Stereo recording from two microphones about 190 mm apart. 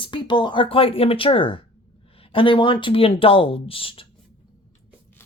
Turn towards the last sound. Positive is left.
turn(degrees=30)  # may be behind; listen again after turning